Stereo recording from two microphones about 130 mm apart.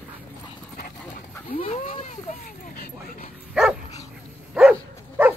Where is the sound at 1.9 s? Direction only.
65° left (ahead or behind).